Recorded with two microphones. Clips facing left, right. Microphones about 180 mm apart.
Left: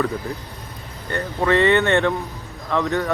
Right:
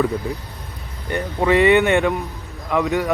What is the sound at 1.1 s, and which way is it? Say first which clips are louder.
Speech: right 2 dB; 15° right (ahead or behind).